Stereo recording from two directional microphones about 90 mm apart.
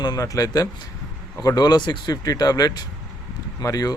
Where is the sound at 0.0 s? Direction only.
45° left (ahead or behind).